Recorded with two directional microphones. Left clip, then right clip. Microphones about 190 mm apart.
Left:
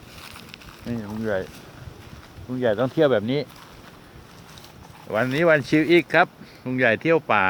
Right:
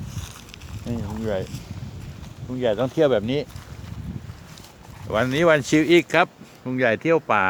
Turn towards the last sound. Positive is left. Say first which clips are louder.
# even
turn(degrees=-5)  # may be behind; listen again after turning